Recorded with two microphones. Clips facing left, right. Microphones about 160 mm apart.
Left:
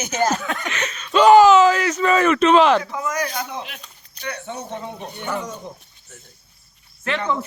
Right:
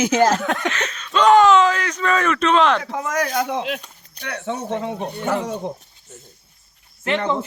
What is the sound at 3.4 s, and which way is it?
Speech, 85° right.